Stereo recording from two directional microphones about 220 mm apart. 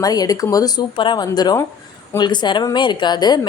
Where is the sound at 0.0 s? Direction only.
15° left (ahead or behind).